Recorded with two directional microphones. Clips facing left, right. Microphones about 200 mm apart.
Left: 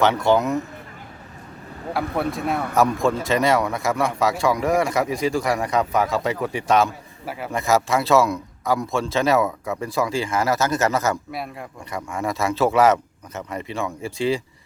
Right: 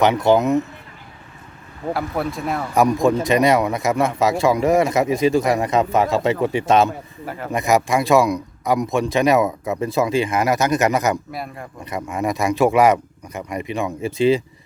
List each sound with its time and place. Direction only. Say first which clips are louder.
0.0 s speech: right 3 dB; 20° right (ahead or behind)
1.9 s a man's voice: right 1 dB; centre (ahead or behind)
2.7 s a man's voice: right 4 dB; 15° right (ahead or behind)
7.3 s speech: right 1 dB; 10° left (ahead or behind)
7.5 s a man's voice: right 2 dB; 15° right (ahead or behind)